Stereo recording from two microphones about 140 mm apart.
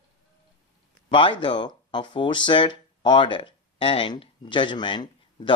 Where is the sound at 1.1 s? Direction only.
35° left (ahead or behind).